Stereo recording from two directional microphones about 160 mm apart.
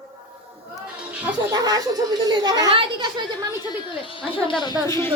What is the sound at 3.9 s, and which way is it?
Speech, 30° left (ahead or behind).